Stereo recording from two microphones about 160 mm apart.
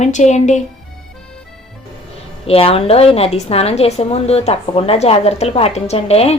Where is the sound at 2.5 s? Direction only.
35° left (ahead or behind).